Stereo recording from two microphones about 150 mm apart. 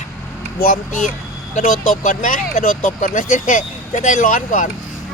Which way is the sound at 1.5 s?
55° left (ahead or behind).